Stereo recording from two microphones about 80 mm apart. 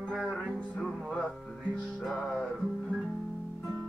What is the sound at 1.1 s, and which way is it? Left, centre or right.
Music, centre.